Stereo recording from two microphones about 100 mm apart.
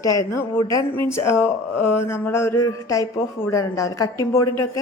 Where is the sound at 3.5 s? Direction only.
35° left (ahead or behind).